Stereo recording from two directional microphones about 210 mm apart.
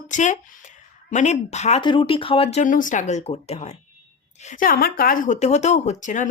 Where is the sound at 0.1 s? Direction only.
35° left (ahead or behind).